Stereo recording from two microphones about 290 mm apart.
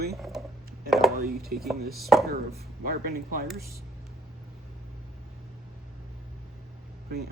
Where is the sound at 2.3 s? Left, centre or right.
Right.